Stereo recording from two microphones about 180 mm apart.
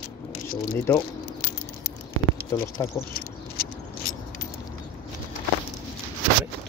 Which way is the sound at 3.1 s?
55° left (ahead or behind).